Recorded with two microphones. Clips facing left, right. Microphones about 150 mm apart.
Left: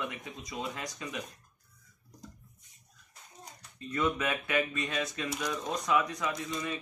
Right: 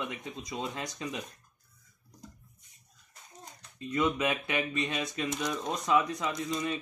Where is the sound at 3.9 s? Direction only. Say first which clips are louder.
Right 2 dB; 20° right (ahead or behind).